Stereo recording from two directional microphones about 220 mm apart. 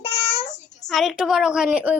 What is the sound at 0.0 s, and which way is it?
Child singing, 25° left (ahead or behind).